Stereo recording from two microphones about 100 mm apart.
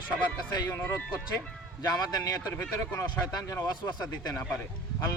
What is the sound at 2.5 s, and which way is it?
Speech, 25° left (ahead or behind).